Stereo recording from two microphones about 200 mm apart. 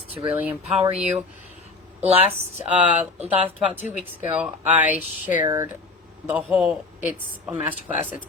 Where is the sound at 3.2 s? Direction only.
10° right (ahead or behind).